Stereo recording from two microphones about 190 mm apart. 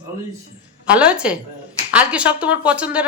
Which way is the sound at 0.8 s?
5° right (ahead or behind).